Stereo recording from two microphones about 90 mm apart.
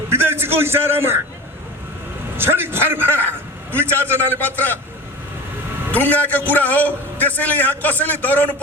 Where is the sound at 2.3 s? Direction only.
25° right (ahead or behind).